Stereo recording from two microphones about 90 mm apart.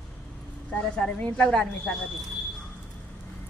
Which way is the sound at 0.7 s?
15° left (ahead or behind).